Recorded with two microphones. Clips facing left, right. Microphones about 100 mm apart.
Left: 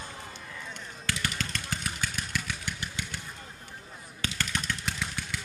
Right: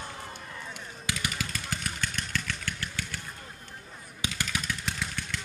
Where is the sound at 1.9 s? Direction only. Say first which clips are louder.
Even; 10° left (ahead or behind).